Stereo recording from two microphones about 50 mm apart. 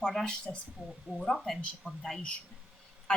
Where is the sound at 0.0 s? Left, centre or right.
Centre.